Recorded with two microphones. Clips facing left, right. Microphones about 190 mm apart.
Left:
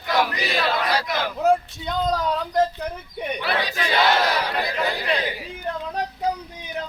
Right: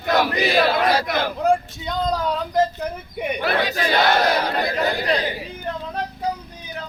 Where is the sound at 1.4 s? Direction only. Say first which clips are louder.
Left 2 dB; centre (ahead or behind).